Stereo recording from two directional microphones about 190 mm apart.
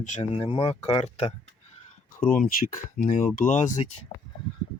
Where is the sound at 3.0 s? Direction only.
50° left (ahead or behind).